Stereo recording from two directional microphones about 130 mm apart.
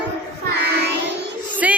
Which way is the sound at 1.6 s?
10° right (ahead or behind).